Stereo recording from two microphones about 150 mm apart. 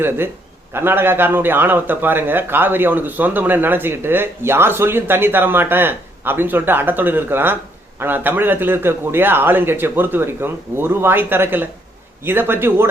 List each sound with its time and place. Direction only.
0.7 s speech: 15° right (ahead or behind)